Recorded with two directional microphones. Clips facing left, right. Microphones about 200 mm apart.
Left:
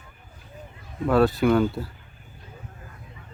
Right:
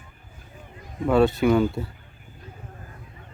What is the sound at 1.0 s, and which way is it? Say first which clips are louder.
Speech: right 1 dB; centre (ahead or behind).